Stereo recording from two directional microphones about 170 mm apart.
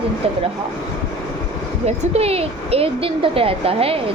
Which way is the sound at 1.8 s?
35° right (ahead or behind).